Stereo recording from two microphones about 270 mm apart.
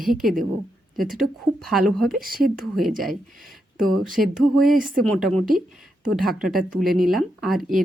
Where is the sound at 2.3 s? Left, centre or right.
Right.